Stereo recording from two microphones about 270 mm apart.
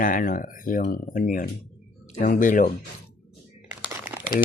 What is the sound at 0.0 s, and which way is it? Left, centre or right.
Speech, left.